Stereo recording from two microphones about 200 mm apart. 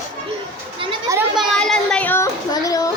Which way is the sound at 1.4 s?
5° left (ahead or behind).